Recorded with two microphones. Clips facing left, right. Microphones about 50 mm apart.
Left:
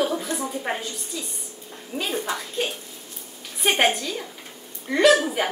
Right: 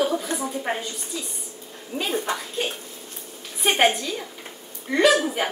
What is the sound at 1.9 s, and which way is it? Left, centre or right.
Speech, centre.